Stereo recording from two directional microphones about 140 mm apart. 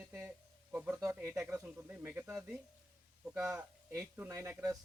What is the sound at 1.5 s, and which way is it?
Speech, 15° right (ahead or behind).